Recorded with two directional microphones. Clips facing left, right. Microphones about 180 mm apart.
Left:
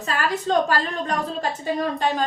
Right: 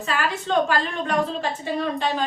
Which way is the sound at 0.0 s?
35° left (ahead or behind).